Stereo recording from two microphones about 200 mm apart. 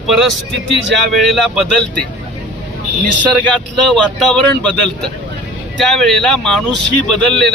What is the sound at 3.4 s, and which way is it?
A man's voice, 5° left (ahead or behind).